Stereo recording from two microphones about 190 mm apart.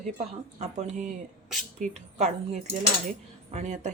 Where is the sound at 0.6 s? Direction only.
40° right (ahead or behind).